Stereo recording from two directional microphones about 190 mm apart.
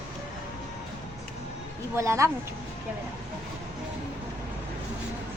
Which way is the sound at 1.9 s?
15° right (ahead or behind).